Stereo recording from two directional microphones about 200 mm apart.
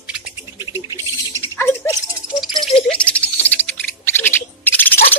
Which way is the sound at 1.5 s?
15° left (ahead or behind).